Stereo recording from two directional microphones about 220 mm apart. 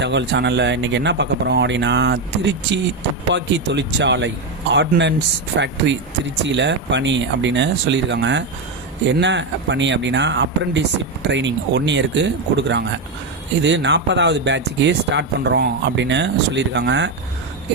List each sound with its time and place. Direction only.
0.0 s speech: 50° right (ahead or behind)